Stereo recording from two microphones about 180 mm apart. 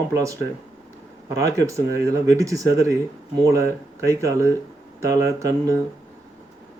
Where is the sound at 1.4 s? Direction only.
15° right (ahead or behind).